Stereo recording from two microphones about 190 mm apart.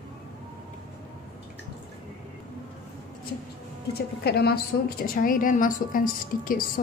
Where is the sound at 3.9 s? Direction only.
55° left (ahead or behind).